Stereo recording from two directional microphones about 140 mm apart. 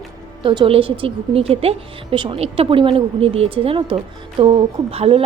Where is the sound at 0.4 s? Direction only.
40° right (ahead or behind).